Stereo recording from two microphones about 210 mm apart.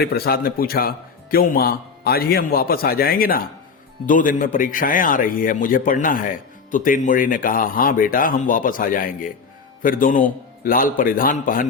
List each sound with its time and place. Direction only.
0.0 s a man's voice: 45° left (ahead or behind)